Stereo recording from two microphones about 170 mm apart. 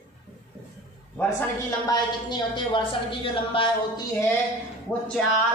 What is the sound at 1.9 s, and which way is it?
A woman's voice, 25° left (ahead or behind).